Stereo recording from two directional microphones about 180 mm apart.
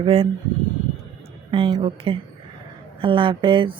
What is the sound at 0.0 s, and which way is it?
Speech, 30° right (ahead or behind).